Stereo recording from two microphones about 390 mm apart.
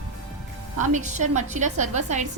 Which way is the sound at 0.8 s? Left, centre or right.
Centre.